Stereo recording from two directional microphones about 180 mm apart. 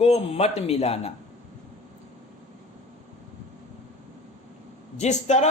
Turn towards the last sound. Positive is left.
turn(degrees=40)  # may be behind; listen again after turning